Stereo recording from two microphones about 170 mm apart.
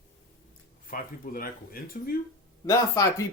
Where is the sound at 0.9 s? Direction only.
55° left (ahead or behind).